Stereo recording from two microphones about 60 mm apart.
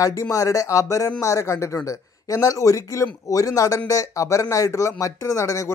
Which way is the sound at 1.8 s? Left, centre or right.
Left.